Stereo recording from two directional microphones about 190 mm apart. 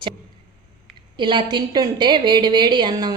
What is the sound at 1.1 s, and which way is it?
A woman's voice, 25° right (ahead or behind).